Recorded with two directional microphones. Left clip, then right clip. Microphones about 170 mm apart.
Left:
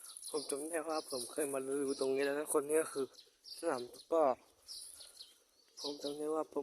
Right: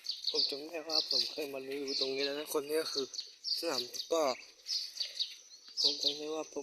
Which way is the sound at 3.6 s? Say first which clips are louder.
Left 3 dB; 5° left (ahead or behind).